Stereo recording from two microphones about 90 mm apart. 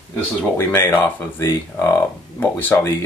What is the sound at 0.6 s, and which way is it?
Speech, 25° left (ahead or behind).